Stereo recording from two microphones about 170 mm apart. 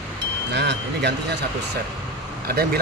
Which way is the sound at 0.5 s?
85° right.